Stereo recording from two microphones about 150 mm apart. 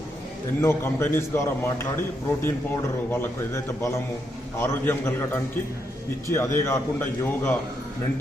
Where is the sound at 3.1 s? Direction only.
15° left (ahead or behind).